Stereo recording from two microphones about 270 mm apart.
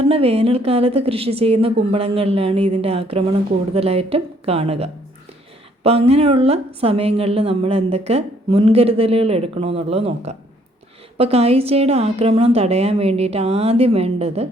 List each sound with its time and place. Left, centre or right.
0.0 s a woman's voice: right